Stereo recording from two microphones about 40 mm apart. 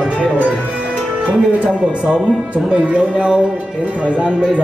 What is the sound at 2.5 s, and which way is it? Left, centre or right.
Speech, right.